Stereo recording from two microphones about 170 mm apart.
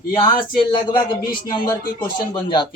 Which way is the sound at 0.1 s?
30° left (ahead or behind).